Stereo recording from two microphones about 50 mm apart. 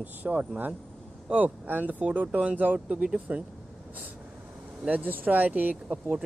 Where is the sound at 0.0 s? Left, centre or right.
Right.